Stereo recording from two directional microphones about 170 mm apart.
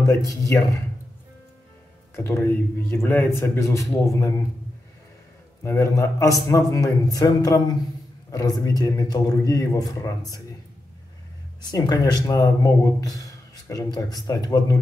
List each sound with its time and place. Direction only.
0.0 s speech: 20° left (ahead or behind)
2.1 s speech: 15° left (ahead or behind)
5.6 s a man's voice: 15° left (ahead or behind)
11.7 s a man's voice: 25° left (ahead or behind)
13.7 s a man's voice: 20° left (ahead or behind)